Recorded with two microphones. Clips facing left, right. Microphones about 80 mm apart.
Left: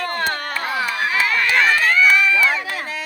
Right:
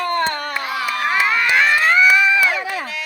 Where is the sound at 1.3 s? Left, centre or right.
Centre.